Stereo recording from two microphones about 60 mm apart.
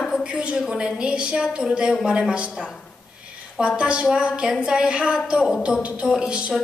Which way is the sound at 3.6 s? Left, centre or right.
Centre.